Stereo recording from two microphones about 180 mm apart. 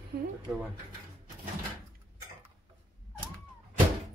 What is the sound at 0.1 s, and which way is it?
Speech, 55° right (ahead or behind).